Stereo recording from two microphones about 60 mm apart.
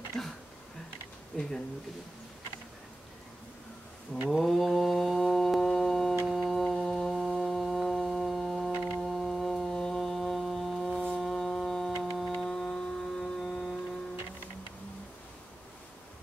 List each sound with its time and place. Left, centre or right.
0.2 s speech: centre
1.3 s speech: centre
4.3 s mantra: centre
6.2 s foghorn: centre